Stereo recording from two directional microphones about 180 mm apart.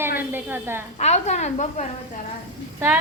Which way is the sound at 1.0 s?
40° left (ahead or behind).